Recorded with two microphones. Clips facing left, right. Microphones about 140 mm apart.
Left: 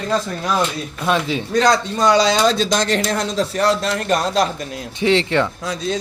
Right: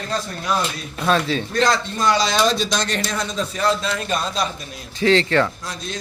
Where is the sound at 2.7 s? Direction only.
80° left.